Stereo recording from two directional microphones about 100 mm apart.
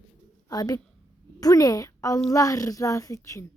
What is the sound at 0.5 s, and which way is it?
A child's voice, 40° left (ahead or behind).